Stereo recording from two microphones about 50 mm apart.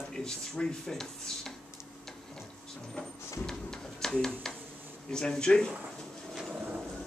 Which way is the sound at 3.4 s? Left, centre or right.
Centre.